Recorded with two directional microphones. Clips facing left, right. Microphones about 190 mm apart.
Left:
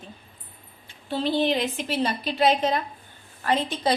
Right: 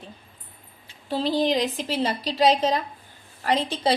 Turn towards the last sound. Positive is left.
turn(degrees=-30)  # may be behind; listen again after turning